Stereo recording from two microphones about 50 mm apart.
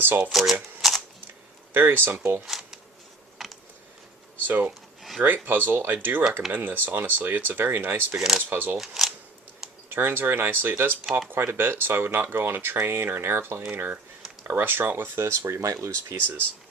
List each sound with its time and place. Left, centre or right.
0.0 s speech: right
0.3 s speech: centre
0.8 s shuffling cards: centre
1.7 s speech: right
3.3 s a sound: centre
4.4 s speech: right
8.8 s speech: centre
9.9 s speech: right
13.7 s speech: right
15.2 s speech: right